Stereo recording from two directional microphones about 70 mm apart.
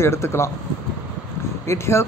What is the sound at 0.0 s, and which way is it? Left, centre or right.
Speech, left.